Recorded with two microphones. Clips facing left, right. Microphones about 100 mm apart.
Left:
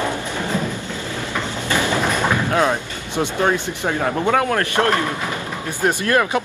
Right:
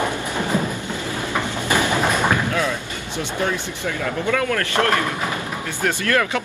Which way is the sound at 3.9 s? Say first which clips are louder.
Left 4 dB; 45° left (ahead or behind).